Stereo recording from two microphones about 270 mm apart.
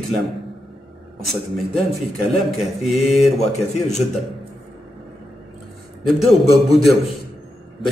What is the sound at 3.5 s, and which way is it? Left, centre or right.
Speech, left.